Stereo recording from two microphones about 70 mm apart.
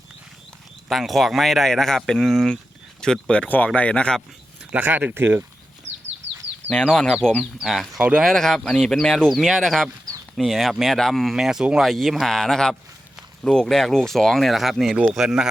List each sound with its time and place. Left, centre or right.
0.9 s speech: centre
4.7 s speech: right
6.7 s speech: centre
7.9 s speech: centre
8.3 s speech: centre
11.8 s speech: centre